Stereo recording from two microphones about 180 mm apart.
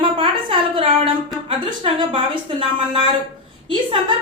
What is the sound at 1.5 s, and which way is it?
A woman's voice, 30° right (ahead or behind).